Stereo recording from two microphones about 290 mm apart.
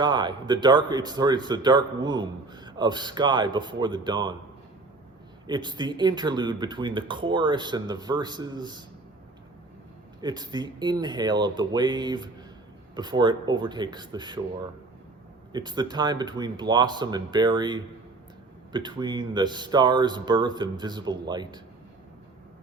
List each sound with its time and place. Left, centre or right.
0.0 s speech: centre
5.5 s speech: centre
10.2 s speech: centre
15.5 s speech: centre